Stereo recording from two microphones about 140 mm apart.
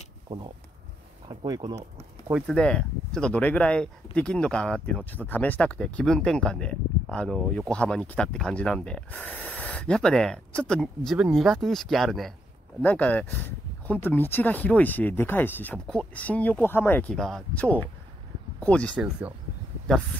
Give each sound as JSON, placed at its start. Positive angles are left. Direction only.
{"t": 1.3, "sound": "speech", "side_deg": -30}
{"t": 2.4, "sound": "speech", "side_deg": 5}
{"t": 17.1, "sound": "speech", "side_deg": 5}